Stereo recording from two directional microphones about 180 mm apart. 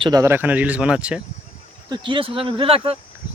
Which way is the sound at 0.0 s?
20° right (ahead or behind).